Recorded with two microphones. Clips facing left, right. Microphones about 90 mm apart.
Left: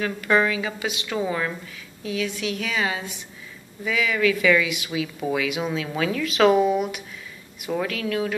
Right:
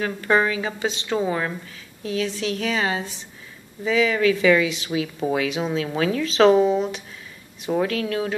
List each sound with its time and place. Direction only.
0.0 s a woman's voice: 30° right (ahead or behind)
7.6 s a woman's voice: 30° right (ahead or behind)